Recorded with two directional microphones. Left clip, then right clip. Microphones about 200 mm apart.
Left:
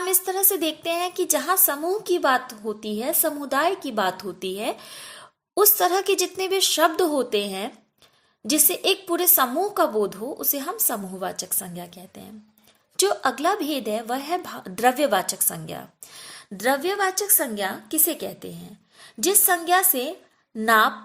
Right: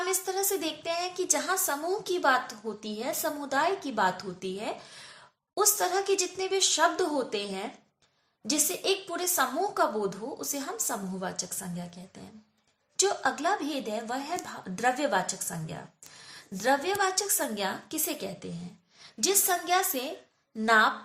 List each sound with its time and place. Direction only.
0.0 s a woman's voice: 40° left (ahead or behind)
16.6 s a woman's voice: 35° left (ahead or behind)